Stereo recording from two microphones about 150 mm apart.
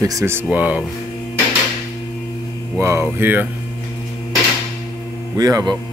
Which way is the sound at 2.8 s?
15° right (ahead or behind).